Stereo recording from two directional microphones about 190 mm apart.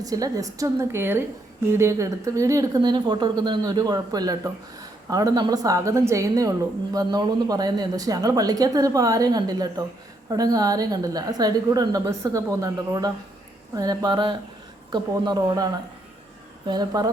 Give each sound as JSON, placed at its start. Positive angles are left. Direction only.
{"t": 0.0, "sound": "a woman's voice", "side_deg": -20}